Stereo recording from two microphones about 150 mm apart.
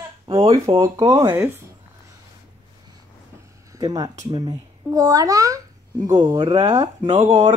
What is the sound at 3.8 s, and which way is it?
A child's voice, 25° right (ahead or behind).